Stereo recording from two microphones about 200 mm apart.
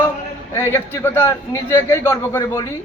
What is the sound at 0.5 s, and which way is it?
A man's voice, 15° left (ahead or behind).